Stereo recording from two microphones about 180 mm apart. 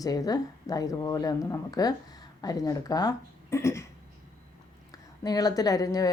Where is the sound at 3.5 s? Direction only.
15° left (ahead or behind).